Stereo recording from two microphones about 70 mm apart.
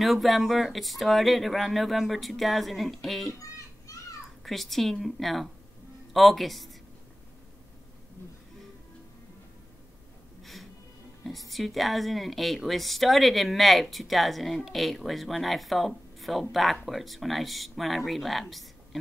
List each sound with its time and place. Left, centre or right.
0.0 s a woman's voice: centre
3.4 s children playing: left
4.5 s a woman's voice: centre
10.4 s music: centre
11.2 s a woman's voice: centre